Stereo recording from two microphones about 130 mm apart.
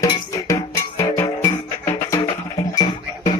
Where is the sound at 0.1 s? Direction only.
25° left (ahead or behind).